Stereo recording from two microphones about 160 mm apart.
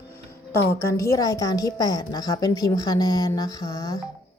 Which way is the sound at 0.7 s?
20° left (ahead or behind).